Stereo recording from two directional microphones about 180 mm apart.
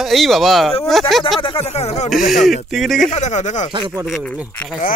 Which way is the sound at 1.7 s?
40° left (ahead or behind).